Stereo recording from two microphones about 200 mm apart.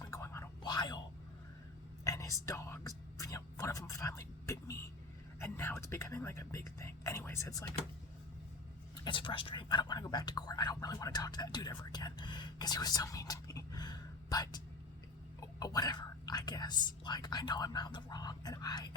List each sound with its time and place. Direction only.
0.0 s a sound: 15° left (ahead or behind)
2.0 s speech: 15° left (ahead or behind)
9.0 s speech: 25° left (ahead or behind)